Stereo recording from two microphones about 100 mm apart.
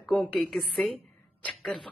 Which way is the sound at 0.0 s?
Centre (ahead or behind).